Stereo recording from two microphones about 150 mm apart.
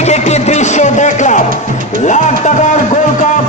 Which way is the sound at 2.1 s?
55° left (ahead or behind).